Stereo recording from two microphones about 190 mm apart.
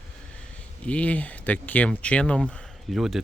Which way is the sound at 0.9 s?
5° left (ahead or behind).